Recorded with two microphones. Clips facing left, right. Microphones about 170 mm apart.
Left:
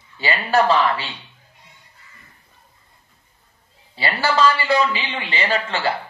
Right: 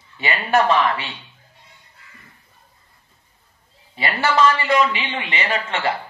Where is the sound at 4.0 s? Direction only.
30° left (ahead or behind).